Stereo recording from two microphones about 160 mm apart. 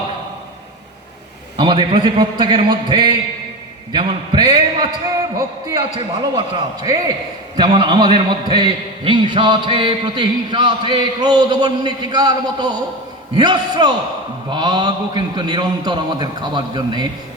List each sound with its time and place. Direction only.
1.5 s a man's voice: 30° right (ahead or behind)